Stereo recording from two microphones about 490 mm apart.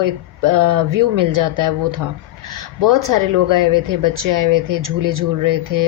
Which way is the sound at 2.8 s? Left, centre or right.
Right.